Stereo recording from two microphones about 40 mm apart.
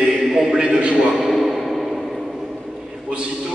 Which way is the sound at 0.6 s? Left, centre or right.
Right.